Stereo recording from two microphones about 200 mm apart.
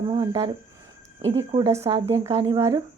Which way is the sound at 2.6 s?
15° right (ahead or behind).